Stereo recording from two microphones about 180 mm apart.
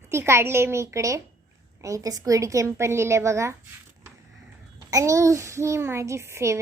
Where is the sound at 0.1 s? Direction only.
15° right (ahead or behind).